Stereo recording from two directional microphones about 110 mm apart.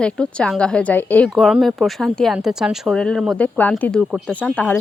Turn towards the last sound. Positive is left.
turn(degrees=15)  # may be behind; listen again after turning